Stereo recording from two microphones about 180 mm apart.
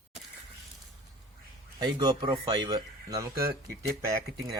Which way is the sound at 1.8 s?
25° right (ahead or behind).